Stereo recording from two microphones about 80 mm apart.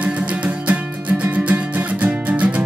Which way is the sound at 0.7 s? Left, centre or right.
Centre.